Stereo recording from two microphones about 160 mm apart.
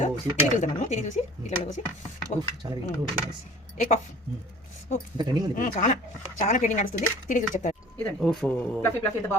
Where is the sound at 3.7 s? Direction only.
45° left (ahead or behind).